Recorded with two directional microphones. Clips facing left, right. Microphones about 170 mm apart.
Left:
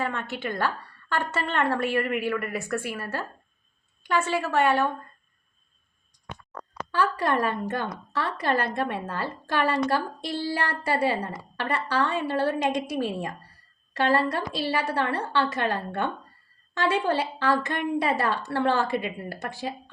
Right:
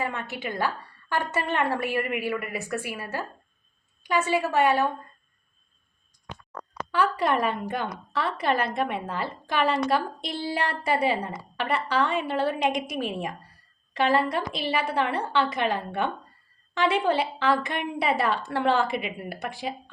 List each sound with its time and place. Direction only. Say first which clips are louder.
0.0 s a woman's voice: left 1 dB; 10° right (ahead or behind)
6.9 s a woman's voice: right 1 dB; 15° right (ahead or behind)